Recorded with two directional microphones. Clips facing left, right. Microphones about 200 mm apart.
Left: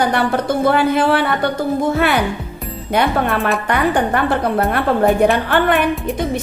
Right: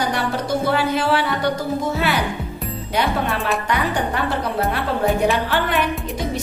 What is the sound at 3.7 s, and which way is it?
A woman's voice, 55° left (ahead or behind).